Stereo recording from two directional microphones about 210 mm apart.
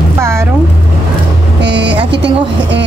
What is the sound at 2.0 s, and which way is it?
Speech, 55° right (ahead or behind).